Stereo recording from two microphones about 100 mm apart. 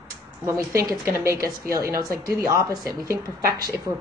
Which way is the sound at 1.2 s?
30° right (ahead or behind).